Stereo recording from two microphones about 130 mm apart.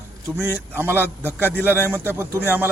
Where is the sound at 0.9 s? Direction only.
15° left (ahead or behind).